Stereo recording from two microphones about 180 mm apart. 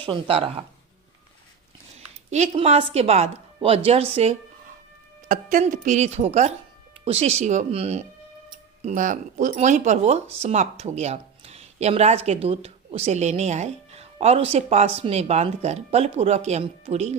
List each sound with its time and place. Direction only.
0.0 s speech: 30° right (ahead or behind)
2.3 s speech: 40° right (ahead or behind)